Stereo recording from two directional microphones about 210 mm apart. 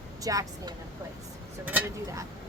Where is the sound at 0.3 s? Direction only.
15° right (ahead or behind).